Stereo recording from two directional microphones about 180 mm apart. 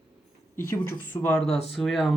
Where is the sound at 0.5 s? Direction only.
15° left (ahead or behind).